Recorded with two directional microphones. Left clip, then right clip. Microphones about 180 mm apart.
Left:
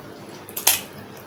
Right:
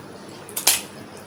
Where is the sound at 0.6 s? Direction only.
10° right (ahead or behind).